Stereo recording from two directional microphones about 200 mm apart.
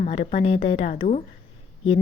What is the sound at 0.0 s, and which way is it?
A woman's voice, 35° left (ahead or behind).